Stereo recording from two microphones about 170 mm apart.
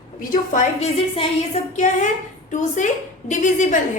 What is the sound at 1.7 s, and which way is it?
A woman's voice, 45° left (ahead or behind).